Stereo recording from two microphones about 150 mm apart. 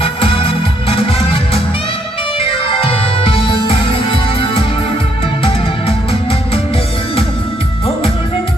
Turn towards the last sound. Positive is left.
turn(degrees=40)  # may be behind; listen again after turning